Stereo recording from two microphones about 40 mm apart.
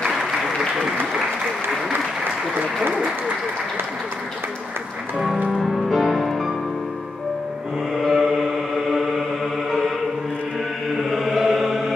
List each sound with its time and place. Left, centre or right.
0.1 s applause: centre
5.6 s music: centre
8.0 s mantra: centre
9.7 s chant: centre
11.1 s chant: centre